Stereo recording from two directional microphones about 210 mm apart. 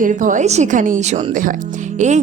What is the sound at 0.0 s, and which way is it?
A woman's voice, 40° right (ahead or behind).